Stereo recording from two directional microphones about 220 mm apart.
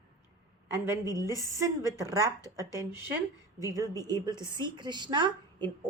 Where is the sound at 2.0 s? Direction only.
15° right (ahead or behind).